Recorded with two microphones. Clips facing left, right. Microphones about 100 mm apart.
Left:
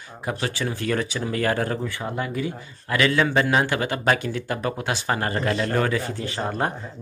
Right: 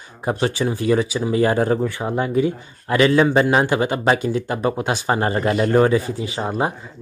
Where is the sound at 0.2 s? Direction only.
25° right (ahead or behind).